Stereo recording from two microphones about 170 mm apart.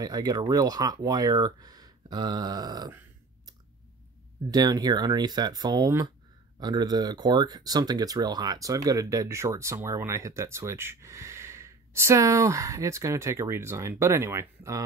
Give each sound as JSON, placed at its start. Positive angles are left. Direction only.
{"t": 0.0, "sound": "speech", "side_deg": -20}
{"t": 4.5, "sound": "speech", "side_deg": -20}